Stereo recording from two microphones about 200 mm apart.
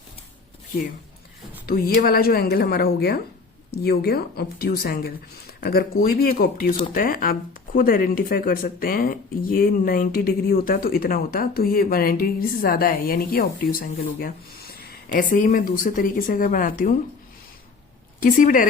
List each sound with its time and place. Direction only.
1.6 s speech: 50° left (ahead or behind)
18.2 s speech: 40° left (ahead or behind)